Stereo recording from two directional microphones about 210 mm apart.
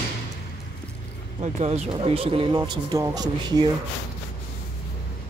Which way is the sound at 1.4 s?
30° right (ahead or behind).